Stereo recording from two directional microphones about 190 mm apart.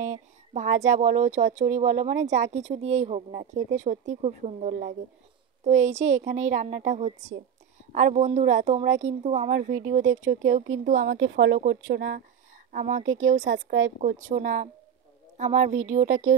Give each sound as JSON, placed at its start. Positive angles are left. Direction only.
{"t": 0.0, "sound": "speech", "side_deg": -40}
{"t": 11.1, "sound": "speech", "side_deg": -70}
{"t": 11.5, "sound": "speech", "side_deg": -55}
{"t": 12.7, "sound": "speech", "side_deg": -40}